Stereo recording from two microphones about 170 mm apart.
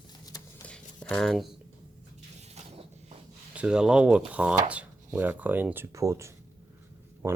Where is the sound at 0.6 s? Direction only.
5° left (ahead or behind).